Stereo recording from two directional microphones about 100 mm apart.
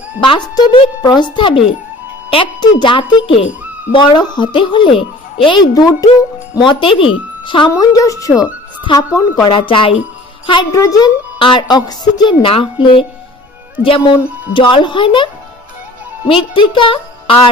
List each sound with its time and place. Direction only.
0.2 s a child's voice: 55° left (ahead or behind)
3.9 s a child's voice: 50° left (ahead or behind)
5.6 s speech: 40° left (ahead or behind)
6.6 s a woman's voice: 55° left (ahead or behind)
7.7 s speech: 40° left (ahead or behind)
9.5 s a woman's voice: 60° left (ahead or behind)
10.7 s speech: 35° left (ahead or behind)
11.3 s a woman's voice: 55° left (ahead or behind)
16.3 s a woman's voice: 55° left (ahead or behind)